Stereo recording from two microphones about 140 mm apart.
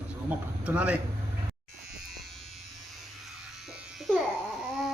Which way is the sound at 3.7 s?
Centre (ahead or behind).